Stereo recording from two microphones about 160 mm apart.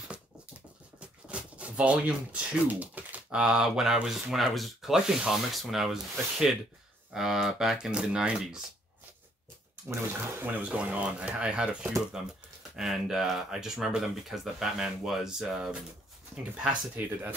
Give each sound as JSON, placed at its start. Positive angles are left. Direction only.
{"t": 0.9, "sound": "speech", "side_deg": -5}
{"t": 7.2, "sound": "speech", "side_deg": 0}
{"t": 10.4, "sound": "speech", "side_deg": -10}